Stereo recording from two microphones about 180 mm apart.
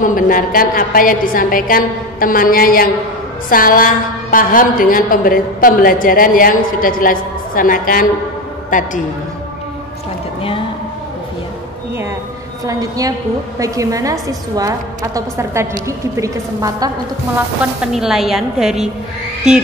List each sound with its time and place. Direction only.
0.0 s a woman's voice: 50° left (ahead or behind)
12.6 s a woman's voice: 20° right (ahead or behind)
17.9 s a woman's voice: centre (ahead or behind)